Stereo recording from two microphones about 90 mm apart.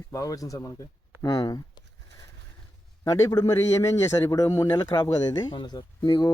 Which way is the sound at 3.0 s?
40° left (ahead or behind).